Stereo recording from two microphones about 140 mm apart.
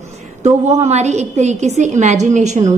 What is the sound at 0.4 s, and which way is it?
A woman's voice, 55° right (ahead or behind).